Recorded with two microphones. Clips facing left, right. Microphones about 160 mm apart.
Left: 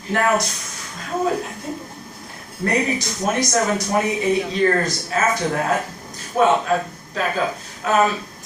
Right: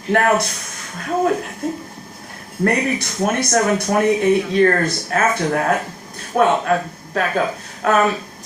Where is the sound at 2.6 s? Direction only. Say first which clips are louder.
Right 2 dB; 60° right (ahead or behind).